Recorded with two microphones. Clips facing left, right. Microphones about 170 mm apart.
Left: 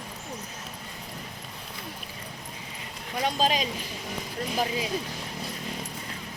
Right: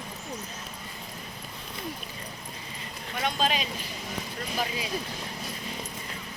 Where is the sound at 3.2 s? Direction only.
35° left (ahead or behind).